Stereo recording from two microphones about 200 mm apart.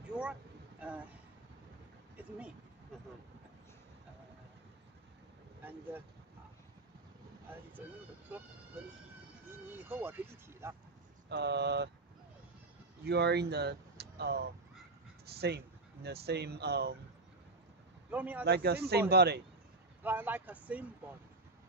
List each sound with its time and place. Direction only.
0.1 s a sound: 5° right (ahead or behind)
5.6 s speech: 10° right (ahead or behind)
9.7 s vehicle: 10° right (ahead or behind)
11.2 s speech: 55° right (ahead or behind)
13.0 s speech: 55° right (ahead or behind)
18.1 s speech: 10° right (ahead or behind)
18.4 s speech: 55° right (ahead or behind)
20.0 s speech: 10° right (ahead or behind)